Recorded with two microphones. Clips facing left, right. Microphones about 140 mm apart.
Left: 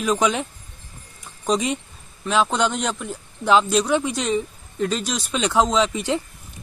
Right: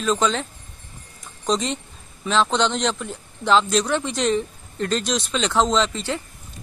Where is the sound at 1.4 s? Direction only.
10° left (ahead or behind).